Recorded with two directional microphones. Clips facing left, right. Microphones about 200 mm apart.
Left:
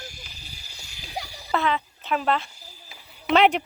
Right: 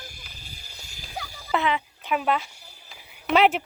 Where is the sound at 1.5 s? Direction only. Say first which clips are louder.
Even; 15° right (ahead or behind).